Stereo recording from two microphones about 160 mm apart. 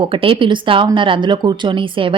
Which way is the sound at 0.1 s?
35° right (ahead or behind).